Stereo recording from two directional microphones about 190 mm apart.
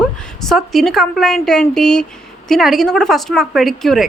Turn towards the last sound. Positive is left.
turn(degrees=0)  # may be behind; listen again after turning